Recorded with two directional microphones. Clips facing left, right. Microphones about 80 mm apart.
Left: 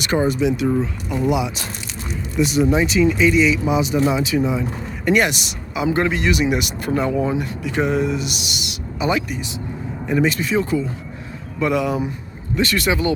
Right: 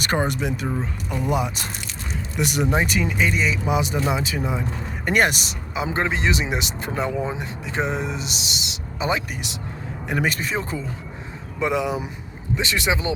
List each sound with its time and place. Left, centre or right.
0.0 s speech: right
2.4 s speech: right
2.7 s speech: right
10.1 s speech: right
11.6 s speech: right